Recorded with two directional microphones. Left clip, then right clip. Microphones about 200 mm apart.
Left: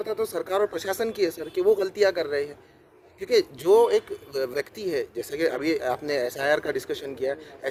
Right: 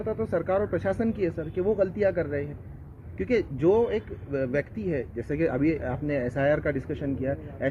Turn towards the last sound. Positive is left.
turn(degrees=30)  # may be behind; listen again after turning